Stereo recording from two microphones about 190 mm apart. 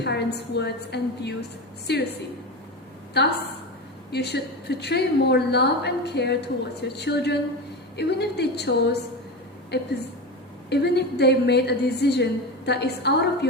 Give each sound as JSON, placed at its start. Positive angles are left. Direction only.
{"t": 0.0, "sound": "a woman's voice", "side_deg": 60}
{"t": 3.2, "sound": "a woman's voice", "side_deg": 60}